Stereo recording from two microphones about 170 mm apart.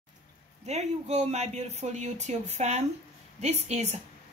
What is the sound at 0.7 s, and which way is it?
A woman's voice, 40° right (ahead or behind).